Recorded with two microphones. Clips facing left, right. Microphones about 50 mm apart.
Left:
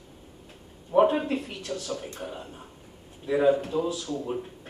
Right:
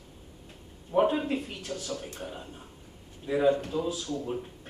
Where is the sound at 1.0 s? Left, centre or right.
Left.